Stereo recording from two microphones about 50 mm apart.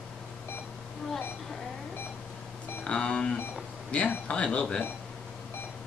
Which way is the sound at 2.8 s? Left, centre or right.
Left.